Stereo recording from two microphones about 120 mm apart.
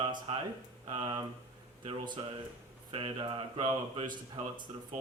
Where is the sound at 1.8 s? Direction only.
40° right (ahead or behind).